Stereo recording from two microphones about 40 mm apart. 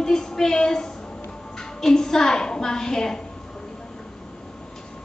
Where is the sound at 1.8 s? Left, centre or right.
Centre.